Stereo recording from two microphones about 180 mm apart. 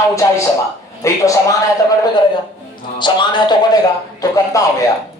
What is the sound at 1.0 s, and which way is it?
Speech, 15° left (ahead or behind).